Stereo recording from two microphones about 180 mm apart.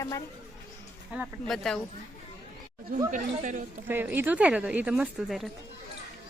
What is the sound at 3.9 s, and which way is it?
A woman's voice, 10° right (ahead or behind).